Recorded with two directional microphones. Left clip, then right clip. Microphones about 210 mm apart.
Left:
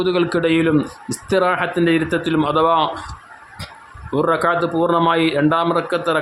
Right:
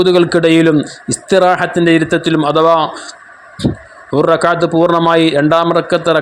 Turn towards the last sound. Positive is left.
turn(degrees=-20)  # may be behind; listen again after turning